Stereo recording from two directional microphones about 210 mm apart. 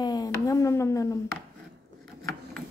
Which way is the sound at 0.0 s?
20° left (ahead or behind).